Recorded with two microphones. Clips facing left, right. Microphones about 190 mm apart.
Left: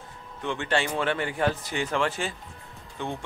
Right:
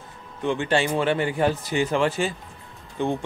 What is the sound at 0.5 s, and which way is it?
Speech, 10° right (ahead or behind).